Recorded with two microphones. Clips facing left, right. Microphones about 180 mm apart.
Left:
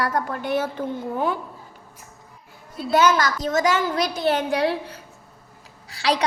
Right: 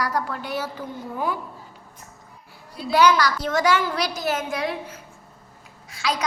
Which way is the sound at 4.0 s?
30° left (ahead or behind).